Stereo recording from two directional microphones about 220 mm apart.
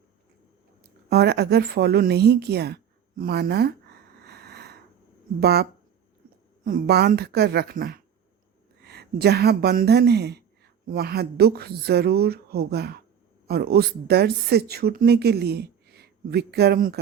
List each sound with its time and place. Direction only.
1.1 s a woman's voice: 45° right (ahead or behind)
4.2 s a sound: 45° right (ahead or behind)
5.4 s a woman's voice: 45° right (ahead or behind)
6.7 s a woman's voice: 45° right (ahead or behind)